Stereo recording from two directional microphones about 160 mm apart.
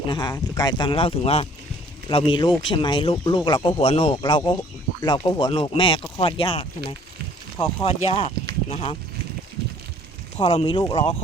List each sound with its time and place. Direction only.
0.1 s speech: 25° left (ahead or behind)
10.3 s speech: 35° left (ahead or behind)